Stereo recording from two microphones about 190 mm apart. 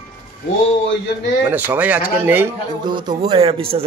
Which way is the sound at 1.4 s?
10° right (ahead or behind).